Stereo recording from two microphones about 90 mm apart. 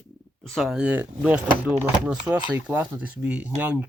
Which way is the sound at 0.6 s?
Centre (ahead or behind).